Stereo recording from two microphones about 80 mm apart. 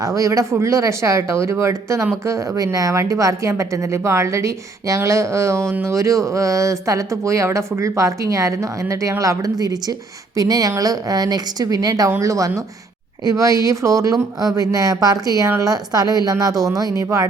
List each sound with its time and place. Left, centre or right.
0.0 s speech: right